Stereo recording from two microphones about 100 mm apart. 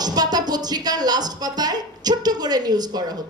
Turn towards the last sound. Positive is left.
turn(degrees=-40)  # may be behind; listen again after turning